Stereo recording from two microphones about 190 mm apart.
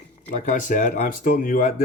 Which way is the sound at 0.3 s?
45° left (ahead or behind).